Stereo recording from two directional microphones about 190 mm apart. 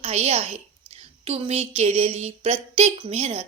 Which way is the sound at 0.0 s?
35° right (ahead or behind).